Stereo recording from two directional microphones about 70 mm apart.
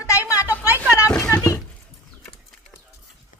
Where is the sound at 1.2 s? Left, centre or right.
Left.